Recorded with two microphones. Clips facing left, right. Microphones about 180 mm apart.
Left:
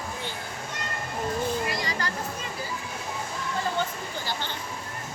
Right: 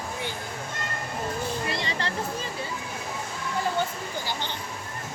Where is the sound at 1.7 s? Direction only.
25° right (ahead or behind).